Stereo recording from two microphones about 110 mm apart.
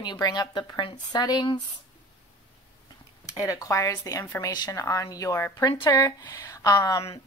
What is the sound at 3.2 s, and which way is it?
Speech, 30° left (ahead or behind).